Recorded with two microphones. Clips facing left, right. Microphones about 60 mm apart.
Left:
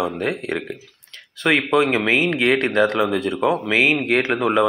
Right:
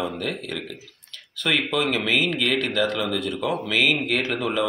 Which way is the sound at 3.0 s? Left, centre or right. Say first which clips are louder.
Left 6 dB; left.